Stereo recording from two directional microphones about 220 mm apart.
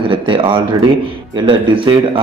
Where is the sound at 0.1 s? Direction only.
20° right (ahead or behind).